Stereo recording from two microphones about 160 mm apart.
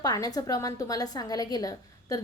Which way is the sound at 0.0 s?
25° left (ahead or behind).